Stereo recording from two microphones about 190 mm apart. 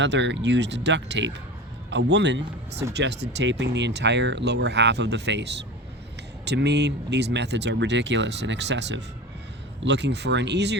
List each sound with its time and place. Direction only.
0.0 s speech: 65° right (ahead or behind)